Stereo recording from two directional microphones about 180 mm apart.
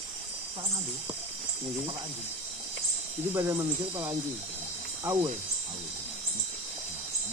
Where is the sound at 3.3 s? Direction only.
15° right (ahead or behind).